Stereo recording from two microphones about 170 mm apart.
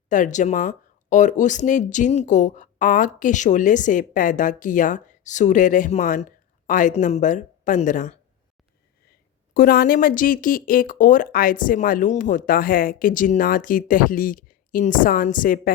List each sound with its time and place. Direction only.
0.1 s speech: 50° left (ahead or behind)
9.6 s speech: 60° left (ahead or behind)